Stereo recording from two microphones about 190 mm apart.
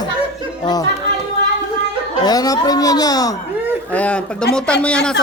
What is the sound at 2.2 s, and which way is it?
Speech, 20° left (ahead or behind).